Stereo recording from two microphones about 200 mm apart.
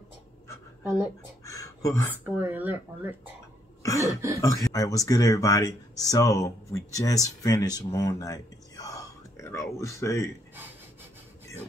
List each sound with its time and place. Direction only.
1.4 s a sound: 15° left (ahead or behind)
2.2 s speech: 10° right (ahead or behind)
3.8 s cough: 15° left (ahead or behind)
4.4 s speech: 15° left (ahead or behind)